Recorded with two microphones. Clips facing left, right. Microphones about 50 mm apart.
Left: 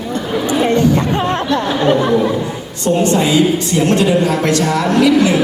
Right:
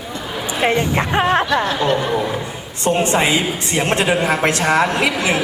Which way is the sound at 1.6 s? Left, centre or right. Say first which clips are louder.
Left 5 dB; centre.